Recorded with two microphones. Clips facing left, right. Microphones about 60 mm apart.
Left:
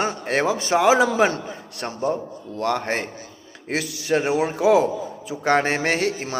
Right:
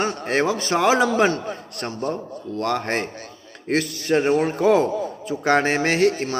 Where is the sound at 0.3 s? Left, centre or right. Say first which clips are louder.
Even; centre.